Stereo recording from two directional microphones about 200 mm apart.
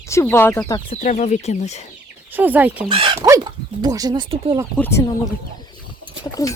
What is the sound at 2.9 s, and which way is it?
Speech, 25° right (ahead or behind).